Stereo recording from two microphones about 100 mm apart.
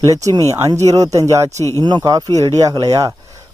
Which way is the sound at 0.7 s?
35° right (ahead or behind).